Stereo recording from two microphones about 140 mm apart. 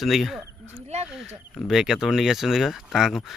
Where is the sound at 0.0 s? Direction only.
Centre (ahead or behind).